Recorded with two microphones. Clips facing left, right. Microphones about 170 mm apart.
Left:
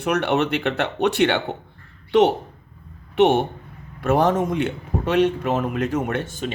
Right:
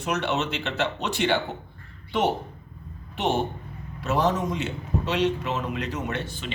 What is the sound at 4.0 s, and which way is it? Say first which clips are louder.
A man's voice: left 5 dB; 55° left (ahead or behind).